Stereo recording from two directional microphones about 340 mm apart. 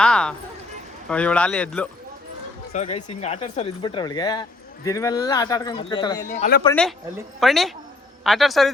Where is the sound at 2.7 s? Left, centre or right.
Centre.